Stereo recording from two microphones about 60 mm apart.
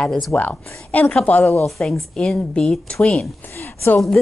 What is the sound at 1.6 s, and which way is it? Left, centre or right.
Speech, centre.